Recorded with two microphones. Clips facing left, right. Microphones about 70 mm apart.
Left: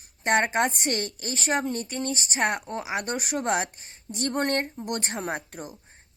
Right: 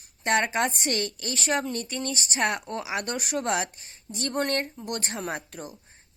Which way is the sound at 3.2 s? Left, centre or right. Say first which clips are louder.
Left 1 dB; left.